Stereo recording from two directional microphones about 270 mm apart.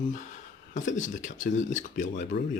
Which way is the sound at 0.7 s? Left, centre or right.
Left.